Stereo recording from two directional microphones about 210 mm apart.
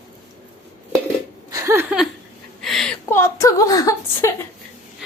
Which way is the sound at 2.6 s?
Centre (ahead or behind).